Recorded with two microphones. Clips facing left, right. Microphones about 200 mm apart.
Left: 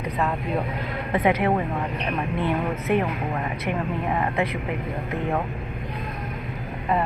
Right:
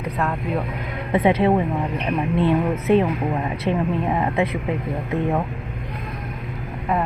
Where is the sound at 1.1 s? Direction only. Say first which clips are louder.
Right 4 dB; 25° right (ahead or behind).